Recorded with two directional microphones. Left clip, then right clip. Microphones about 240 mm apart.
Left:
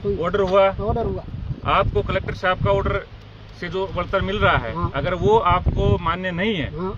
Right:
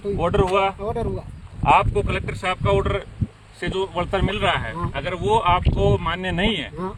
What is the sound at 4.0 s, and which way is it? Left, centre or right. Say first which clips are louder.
Speech: left 3 dB; centre.